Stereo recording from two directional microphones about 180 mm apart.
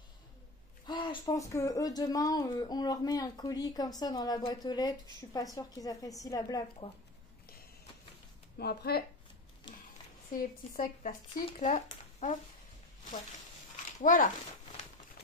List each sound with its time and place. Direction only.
0.8 s speech: 25° left (ahead or behind)
8.5 s speech: 60° left (ahead or behind)
10.3 s speech: 50° left (ahead or behind)
14.0 s speech: 45° left (ahead or behind)